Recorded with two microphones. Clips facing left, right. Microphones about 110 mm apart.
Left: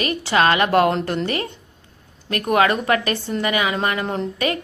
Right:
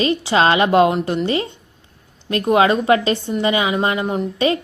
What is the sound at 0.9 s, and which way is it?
Speech, 10° right (ahead or behind).